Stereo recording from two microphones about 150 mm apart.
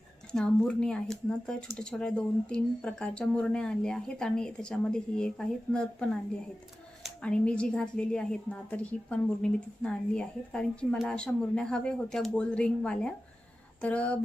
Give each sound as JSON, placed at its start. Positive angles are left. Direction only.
{"t": 0.3, "sound": "a woman's voice", "side_deg": 5}